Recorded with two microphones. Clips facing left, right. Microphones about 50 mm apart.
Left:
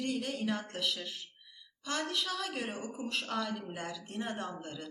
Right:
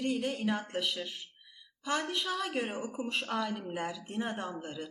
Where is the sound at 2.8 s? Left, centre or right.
Centre.